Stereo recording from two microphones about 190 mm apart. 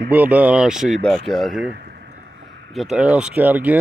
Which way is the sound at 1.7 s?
55° right (ahead or behind).